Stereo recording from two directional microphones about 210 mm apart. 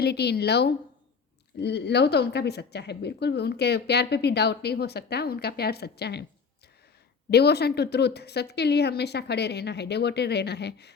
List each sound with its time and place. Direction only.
0.0 s speech: 50° left (ahead or behind)
7.3 s speech: 50° left (ahead or behind)